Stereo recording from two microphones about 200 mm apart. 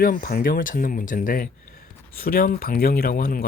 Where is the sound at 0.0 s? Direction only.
45° left (ahead or behind).